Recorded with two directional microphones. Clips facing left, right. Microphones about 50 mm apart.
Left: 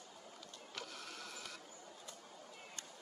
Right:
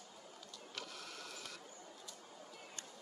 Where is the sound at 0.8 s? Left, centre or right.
Left.